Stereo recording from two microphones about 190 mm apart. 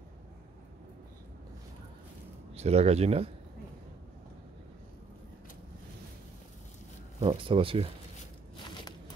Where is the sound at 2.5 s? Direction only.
35° right (ahead or behind).